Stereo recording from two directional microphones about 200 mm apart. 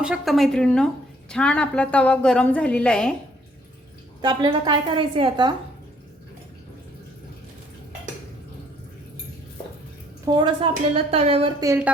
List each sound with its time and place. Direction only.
0.0 s a woman's voice: centre (ahead or behind)
4.2 s a woman's voice: 20° right (ahead or behind)
10.2 s a woman's voice: 20° right (ahead or behind)
11.6 s speech: 15° right (ahead or behind)